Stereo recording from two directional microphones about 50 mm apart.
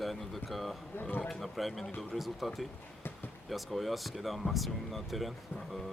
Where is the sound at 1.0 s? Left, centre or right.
Left.